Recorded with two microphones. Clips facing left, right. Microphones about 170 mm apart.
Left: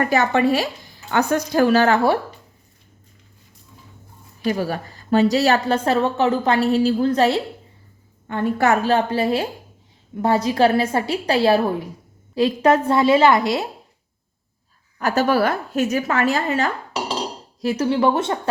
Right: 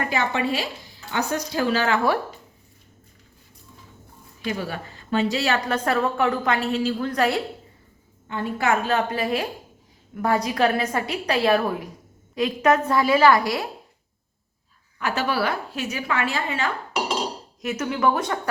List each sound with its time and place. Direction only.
0.0 s a woman's voice: 45° left (ahead or behind)
4.4 s a woman's voice: 40° left (ahead or behind)
5.5 s a woman's voice: 30° left (ahead or behind)
8.3 s a woman's voice: 45° left (ahead or behind); by 13.7 s 25° left (ahead or behind)
14.9 s a woman's voice: 40° left (ahead or behind)